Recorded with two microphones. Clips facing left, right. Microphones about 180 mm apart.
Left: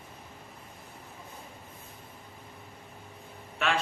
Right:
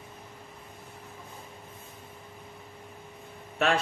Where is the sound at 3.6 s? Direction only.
40° right (ahead or behind).